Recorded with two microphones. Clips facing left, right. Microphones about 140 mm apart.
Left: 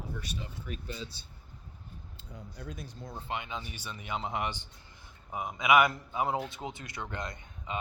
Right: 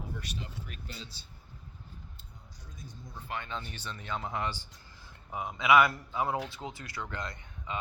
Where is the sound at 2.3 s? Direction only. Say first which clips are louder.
Left 11 dB; 90° left; by 2.9 s 70° left (ahead or behind).